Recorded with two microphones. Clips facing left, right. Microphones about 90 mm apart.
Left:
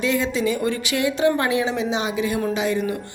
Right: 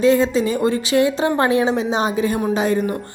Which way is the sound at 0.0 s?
35° right (ahead or behind).